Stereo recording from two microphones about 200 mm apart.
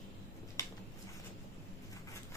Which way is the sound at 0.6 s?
15° left (ahead or behind).